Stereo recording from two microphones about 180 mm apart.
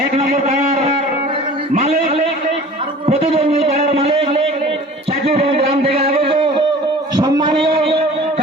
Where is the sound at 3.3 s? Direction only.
35° right (ahead or behind).